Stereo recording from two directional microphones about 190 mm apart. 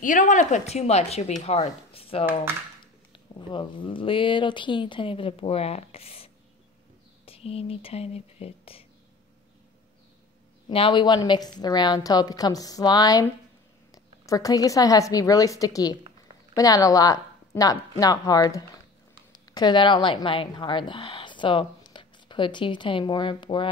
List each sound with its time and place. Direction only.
0.0 s speech: 40° left (ahead or behind)
3.3 s speech: 25° left (ahead or behind)
10.7 s a woman's voice: 25° left (ahead or behind)